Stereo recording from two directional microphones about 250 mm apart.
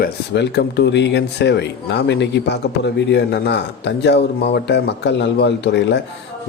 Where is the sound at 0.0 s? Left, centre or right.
Left.